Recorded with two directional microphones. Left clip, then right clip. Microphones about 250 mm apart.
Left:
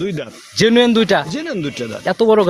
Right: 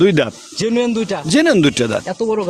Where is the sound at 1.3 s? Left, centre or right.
Right.